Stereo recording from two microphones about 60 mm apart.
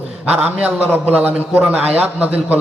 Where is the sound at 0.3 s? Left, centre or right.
Right.